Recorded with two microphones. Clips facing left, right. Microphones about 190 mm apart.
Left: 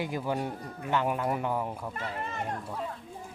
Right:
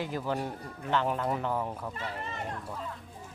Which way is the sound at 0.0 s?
10° left (ahead or behind).